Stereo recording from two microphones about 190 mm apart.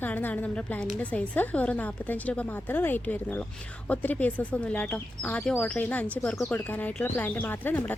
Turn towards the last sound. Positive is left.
turn(degrees=10)  # may be behind; listen again after turning